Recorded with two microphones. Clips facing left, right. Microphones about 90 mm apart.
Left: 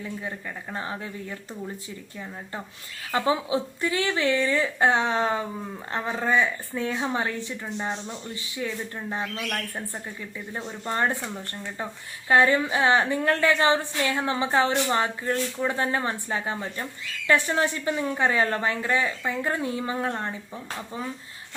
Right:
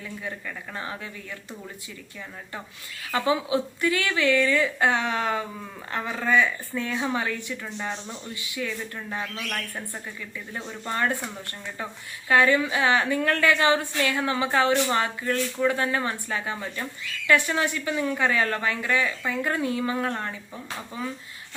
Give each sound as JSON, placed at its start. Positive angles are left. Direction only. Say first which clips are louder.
{"t": 0.0, "sound": "a woman's voice", "louder": "left 1 dB", "side_deg": 30}
{"t": 3.1, "sound": "a woman's voice", "louder": "even", "side_deg": 25}
{"t": 10.6, "sound": "a woman's voice", "louder": "left 1 dB", "side_deg": 25}
{"t": 12.3, "sound": "a woman's voice", "louder": "even", "side_deg": 30}